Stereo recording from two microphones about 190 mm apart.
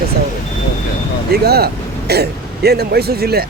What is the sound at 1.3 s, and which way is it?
Speech, 55° right (ahead or behind).